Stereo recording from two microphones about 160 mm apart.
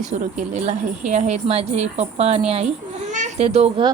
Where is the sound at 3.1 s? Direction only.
45° right (ahead or behind).